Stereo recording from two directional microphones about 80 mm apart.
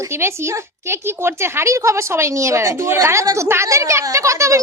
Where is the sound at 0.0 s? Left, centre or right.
Right.